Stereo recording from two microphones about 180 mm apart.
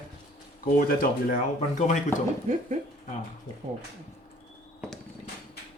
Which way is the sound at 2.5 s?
40° right (ahead or behind).